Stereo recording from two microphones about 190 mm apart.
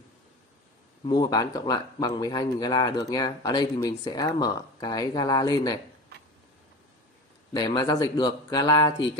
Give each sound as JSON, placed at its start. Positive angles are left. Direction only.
{"t": 1.0, "sound": "speech", "side_deg": 20}
{"t": 7.5, "sound": "speech", "side_deg": 20}